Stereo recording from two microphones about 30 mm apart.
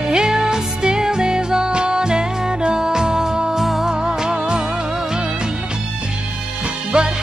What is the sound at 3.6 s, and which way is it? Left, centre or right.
Music, centre.